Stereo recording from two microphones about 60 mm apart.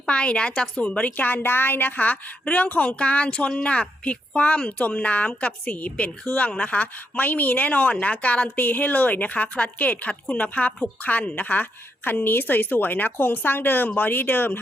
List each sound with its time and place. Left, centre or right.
0.0 s a woman's voice: centre; by 14.6 s left